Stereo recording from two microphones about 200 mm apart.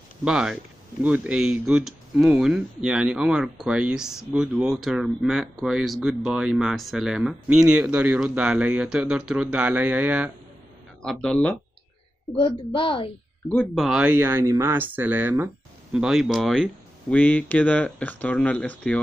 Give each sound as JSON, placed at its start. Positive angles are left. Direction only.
{"t": 0.2, "sound": "speech", "side_deg": -5}
{"t": 12.4, "sound": "a woman's voice", "side_deg": 25}
{"t": 13.7, "sound": "speech", "side_deg": -5}